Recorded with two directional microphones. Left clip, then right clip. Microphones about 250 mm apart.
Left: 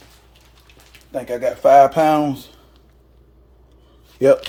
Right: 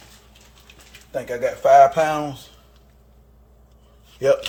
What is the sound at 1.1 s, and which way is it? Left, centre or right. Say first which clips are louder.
Speech: left 2 dB; left.